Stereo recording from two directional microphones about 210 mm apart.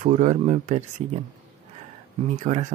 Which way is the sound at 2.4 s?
30° right (ahead or behind).